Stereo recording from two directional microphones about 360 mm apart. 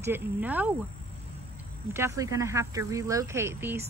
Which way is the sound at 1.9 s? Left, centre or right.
Centre.